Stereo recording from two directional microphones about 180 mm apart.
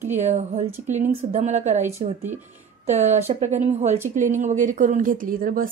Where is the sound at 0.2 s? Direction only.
40° right (ahead or behind).